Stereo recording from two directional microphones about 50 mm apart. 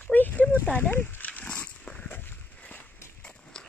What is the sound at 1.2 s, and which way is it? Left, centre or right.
Dog, left.